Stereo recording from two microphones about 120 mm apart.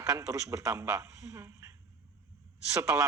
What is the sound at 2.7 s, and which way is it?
Speech, 25° right (ahead or behind).